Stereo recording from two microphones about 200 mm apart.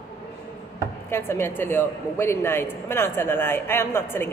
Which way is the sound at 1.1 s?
10° left (ahead or behind).